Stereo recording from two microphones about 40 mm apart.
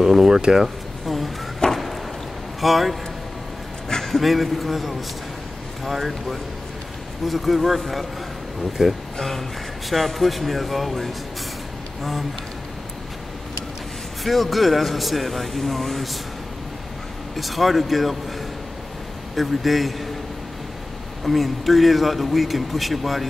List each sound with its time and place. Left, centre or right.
0.0 s speech: centre
1.0 s a sound: centre
2.6 s a man's voice: centre
7.2 s a man's voice: centre
8.8 s speech: centre
9.8 s a man's voice: centre
14.2 s a man's voice: centre
17.4 s a man's voice: centre
19.3 s a man's voice: centre
21.2 s a man's voice: centre